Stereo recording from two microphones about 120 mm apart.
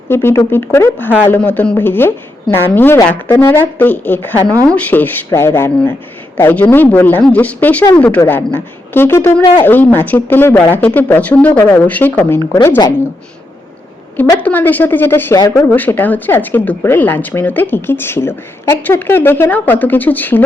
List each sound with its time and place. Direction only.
0.1 s a woman's voice: 20° left (ahead or behind)
9.4 s speech: 45° left (ahead or behind)
9.6 s speech: 15° left (ahead or behind)
14.3 s speech: 15° left (ahead or behind)